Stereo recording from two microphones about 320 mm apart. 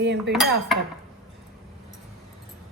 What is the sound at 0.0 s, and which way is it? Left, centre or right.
Speech, right.